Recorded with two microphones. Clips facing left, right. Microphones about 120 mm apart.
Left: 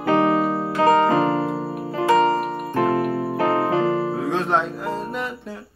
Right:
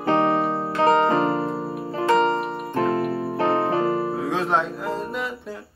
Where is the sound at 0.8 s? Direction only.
30° right (ahead or behind).